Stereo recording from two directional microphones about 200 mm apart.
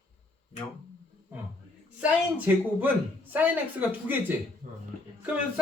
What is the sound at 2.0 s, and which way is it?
Speech, 10° right (ahead or behind).